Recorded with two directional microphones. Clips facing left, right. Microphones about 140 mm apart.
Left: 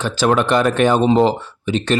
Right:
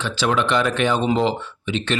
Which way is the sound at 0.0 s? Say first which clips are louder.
Left 5 dB; 45° left (ahead or behind).